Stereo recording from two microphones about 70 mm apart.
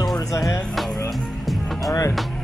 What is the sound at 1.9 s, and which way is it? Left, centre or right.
Speech, left.